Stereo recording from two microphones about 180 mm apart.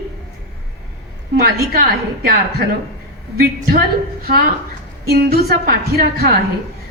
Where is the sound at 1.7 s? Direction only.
55° right (ahead or behind).